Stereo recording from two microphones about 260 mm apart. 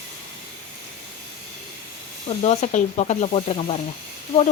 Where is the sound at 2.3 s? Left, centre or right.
Left.